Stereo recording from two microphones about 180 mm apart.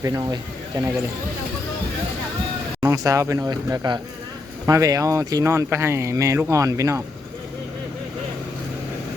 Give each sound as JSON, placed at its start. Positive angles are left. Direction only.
{"t": 0.0, "sound": "speech", "side_deg": -20}
{"t": 2.8, "sound": "speech", "side_deg": -20}